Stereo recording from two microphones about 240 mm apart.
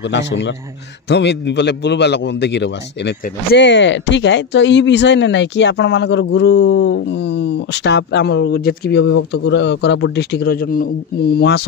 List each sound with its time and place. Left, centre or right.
0.1 s a man's voice: left